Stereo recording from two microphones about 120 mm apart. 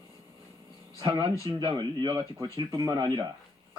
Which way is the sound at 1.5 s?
35° right (ahead or behind).